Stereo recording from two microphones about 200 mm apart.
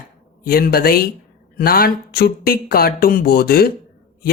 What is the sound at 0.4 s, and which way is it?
Speech, 50° left (ahead or behind).